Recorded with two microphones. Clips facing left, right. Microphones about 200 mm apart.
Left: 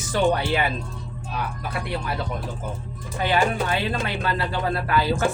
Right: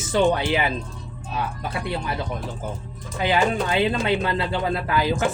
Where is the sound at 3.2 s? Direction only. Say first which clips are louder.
Right 1 dB; 20° right (ahead or behind).